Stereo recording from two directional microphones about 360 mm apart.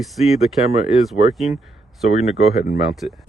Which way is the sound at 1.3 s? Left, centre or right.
Centre.